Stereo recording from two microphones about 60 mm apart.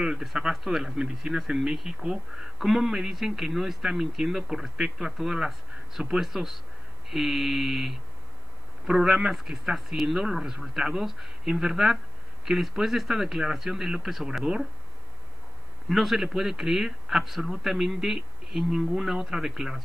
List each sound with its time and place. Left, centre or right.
0.0 s speech: centre
15.9 s speech: centre